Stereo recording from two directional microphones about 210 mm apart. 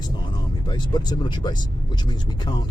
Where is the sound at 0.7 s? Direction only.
20° left (ahead or behind).